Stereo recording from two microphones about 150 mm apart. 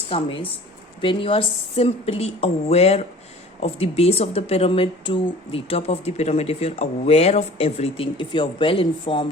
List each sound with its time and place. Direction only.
0.1 s speech: 35° left (ahead or behind)